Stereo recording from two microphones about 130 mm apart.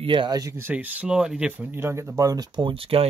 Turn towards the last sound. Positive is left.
turn(degrees=-45)  # may be behind; listen again after turning